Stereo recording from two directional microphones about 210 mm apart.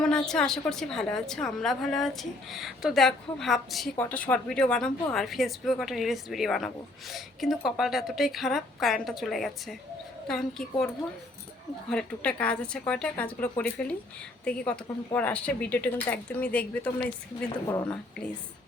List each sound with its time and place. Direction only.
0.0 s a woman's voice: 5° left (ahead or behind)
11.9 s a woman's voice: 5° left (ahead or behind)